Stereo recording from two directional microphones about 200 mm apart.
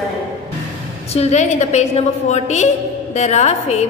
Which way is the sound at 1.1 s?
35° left (ahead or behind).